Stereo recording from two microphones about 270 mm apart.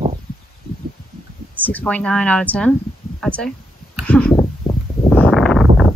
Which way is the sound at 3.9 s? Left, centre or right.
Centre.